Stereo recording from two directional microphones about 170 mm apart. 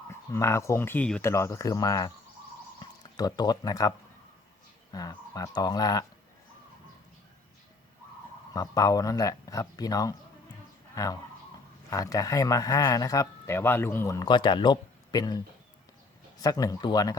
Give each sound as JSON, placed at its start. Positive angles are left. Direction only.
{"t": 0.1, "sound": "speech", "side_deg": 15}
{"t": 1.2, "sound": "speech", "side_deg": 15}
{"t": 8.5, "sound": "speech", "side_deg": 20}
{"t": 16.4, "sound": "speech", "side_deg": 20}